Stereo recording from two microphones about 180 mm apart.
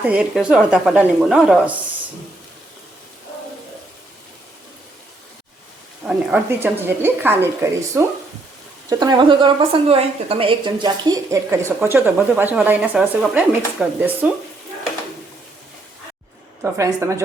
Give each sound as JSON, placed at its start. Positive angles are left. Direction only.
{"t": 0.0, "sound": "a woman's voice", "side_deg": -5}
{"t": 6.1, "sound": "a woman's voice", "side_deg": -10}
{"t": 16.7, "sound": "speech", "side_deg": -15}